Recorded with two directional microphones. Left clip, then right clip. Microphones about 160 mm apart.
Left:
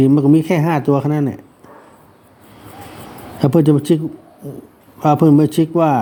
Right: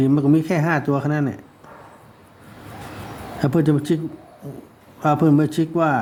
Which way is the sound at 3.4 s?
20° left (ahead or behind).